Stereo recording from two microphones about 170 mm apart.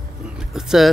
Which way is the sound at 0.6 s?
5° right (ahead or behind).